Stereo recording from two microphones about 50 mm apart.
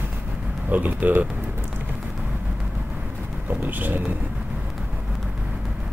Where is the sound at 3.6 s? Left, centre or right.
Right.